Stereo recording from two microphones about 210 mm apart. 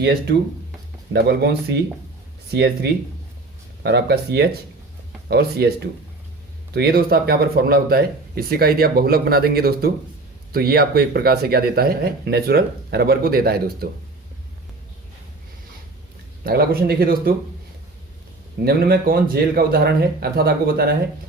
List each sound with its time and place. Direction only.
1.1 s speech: 50° right (ahead or behind)
6.7 s speech: 50° right (ahead or behind)
16.4 s speech: 45° right (ahead or behind)
18.6 s speech: 45° right (ahead or behind)